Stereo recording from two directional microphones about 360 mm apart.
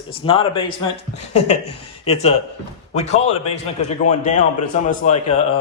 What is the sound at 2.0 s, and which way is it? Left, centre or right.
A man's voice, centre.